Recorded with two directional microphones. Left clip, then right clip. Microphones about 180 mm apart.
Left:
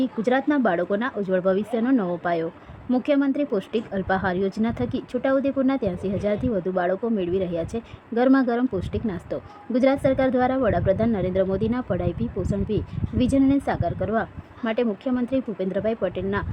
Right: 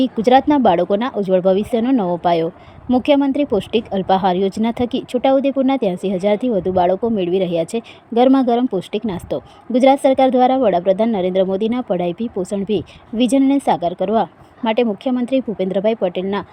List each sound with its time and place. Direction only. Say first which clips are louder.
0.0 s speech: right 9 dB; 20° right (ahead or behind)